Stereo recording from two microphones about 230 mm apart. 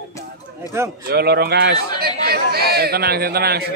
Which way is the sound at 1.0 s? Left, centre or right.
Right.